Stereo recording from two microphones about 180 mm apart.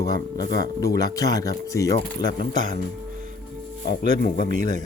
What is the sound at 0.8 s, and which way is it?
Speech, 20° left (ahead or behind).